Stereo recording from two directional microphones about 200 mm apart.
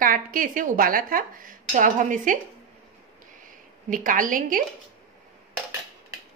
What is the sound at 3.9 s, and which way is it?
Speech, 40° right (ahead or behind).